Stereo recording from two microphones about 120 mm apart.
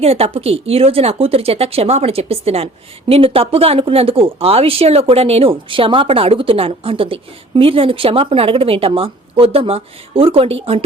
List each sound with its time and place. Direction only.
0.0 s speech: 55° right (ahead or behind)